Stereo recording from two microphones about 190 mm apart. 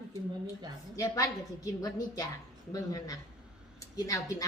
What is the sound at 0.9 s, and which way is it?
Speech, 15° left (ahead or behind).